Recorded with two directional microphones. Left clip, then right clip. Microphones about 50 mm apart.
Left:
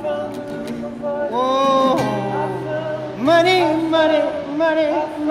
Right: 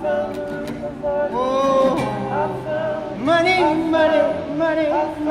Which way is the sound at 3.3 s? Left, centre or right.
Left.